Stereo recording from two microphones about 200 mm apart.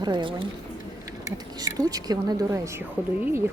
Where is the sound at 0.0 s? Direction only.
25° right (ahead or behind).